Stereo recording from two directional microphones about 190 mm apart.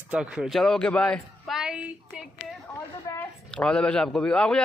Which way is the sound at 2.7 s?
15° left (ahead or behind).